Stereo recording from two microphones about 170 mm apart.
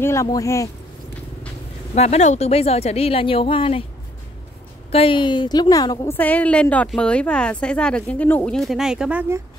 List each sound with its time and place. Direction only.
0.0 s a woman's voice: 15° left (ahead or behind)
2.0 s speech: 40° left (ahead or behind)
4.9 s a woman's voice: 30° left (ahead or behind)
6.1 s a woman's voice: 10° left (ahead or behind)